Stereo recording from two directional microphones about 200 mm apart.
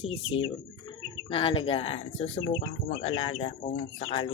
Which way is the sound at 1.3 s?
25° left (ahead or behind).